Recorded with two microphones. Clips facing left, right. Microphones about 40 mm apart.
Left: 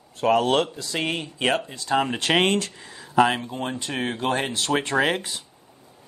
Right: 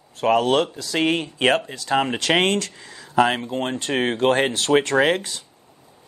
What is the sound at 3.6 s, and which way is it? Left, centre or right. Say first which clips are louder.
Speech: right 5 dB; right.